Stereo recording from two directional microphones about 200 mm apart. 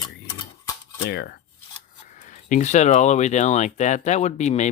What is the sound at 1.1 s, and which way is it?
Speech, 55° left (ahead or behind).